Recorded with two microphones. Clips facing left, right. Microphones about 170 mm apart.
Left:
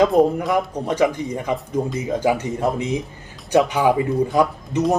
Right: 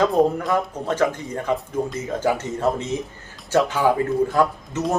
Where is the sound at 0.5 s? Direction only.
15° left (ahead or behind).